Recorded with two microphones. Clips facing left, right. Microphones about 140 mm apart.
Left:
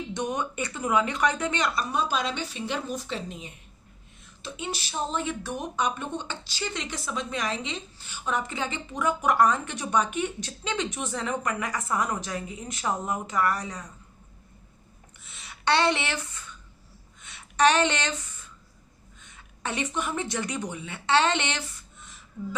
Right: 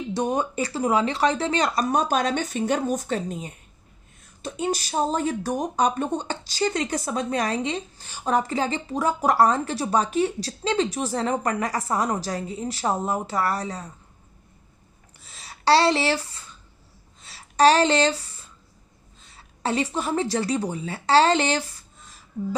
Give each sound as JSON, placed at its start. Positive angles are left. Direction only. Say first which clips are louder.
{"t": 0.1, "sound": "speech", "louder": "right 7 dB", "side_deg": -35}
{"t": 15.2, "sound": "speech", "louder": "right 6 dB", "side_deg": -35}
{"t": 17.2, "sound": "a sound", "louder": "right 4 dB", "side_deg": -35}
{"t": 19.2, "sound": "a woman's voice", "louder": "right 7 dB", "side_deg": -35}